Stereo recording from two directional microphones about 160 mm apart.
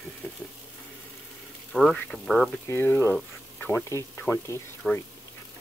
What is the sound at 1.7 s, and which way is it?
Speech, 5° left (ahead or behind).